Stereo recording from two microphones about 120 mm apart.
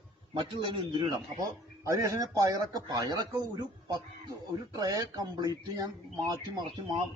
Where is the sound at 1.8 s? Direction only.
25° right (ahead or behind).